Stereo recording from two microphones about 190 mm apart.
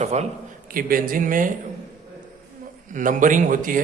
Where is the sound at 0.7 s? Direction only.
50° right (ahead or behind).